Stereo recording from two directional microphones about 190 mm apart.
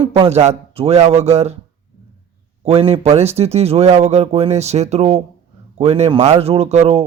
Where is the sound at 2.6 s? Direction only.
30° right (ahead or behind).